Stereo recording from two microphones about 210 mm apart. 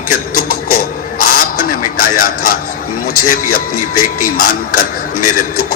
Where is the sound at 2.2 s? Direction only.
40° left (ahead or behind).